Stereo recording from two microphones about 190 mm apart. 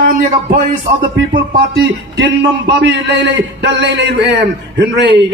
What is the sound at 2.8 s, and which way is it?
A man's voice, 65° right (ahead or behind).